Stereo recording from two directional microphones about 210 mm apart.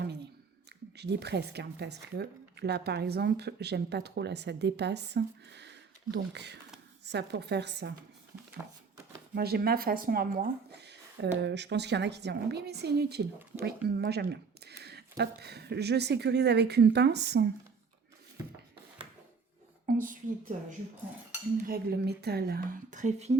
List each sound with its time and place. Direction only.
0.9 s speech: 55° right (ahead or behind)
9.3 s speech: 50° right (ahead or behind)
19.9 s a sound: 40° right (ahead or behind)
21.7 s speech: 50° right (ahead or behind); by 23.4 s 30° right (ahead or behind)